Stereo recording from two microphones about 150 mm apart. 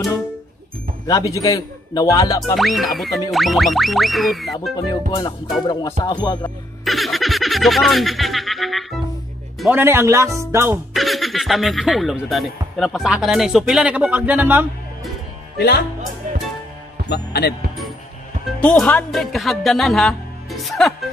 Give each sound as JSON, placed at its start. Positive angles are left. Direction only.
{"t": 1.0, "sound": "music", "side_deg": 25}
{"t": 2.5, "sound": "speech", "side_deg": 0}
{"t": 4.7, "sound": "music", "side_deg": 30}
{"t": 6.8, "sound": "speech", "side_deg": 0}
{"t": 9.8, "sound": "speech", "side_deg": -15}
{"t": 10.9, "sound": "speech", "side_deg": 0}
{"t": 17.1, "sound": "speech", "side_deg": 90}
{"t": 18.6, "sound": "speech", "side_deg": 5}